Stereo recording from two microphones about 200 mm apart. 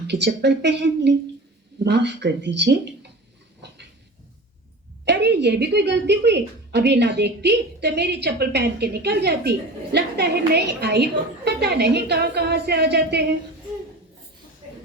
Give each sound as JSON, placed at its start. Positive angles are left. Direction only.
{"t": 0.1, "sound": "a woman's voice", "side_deg": -55}
{"t": 5.0, "sound": "a woman's voice", "side_deg": -60}